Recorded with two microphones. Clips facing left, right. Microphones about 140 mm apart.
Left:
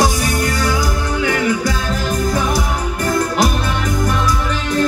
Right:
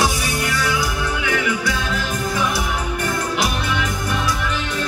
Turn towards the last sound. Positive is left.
turn(degrees=40)  # may be behind; listen again after turning